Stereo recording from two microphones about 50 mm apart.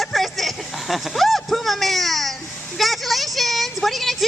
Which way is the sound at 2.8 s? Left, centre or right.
Centre.